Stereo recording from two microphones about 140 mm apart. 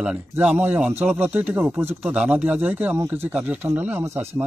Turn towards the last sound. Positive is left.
turn(degrees=-15)  # may be behind; listen again after turning